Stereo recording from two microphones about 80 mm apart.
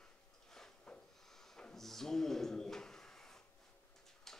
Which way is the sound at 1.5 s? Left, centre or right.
Centre.